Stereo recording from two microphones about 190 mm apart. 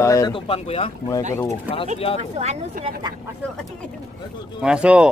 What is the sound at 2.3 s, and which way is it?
Speech, 35° right (ahead or behind).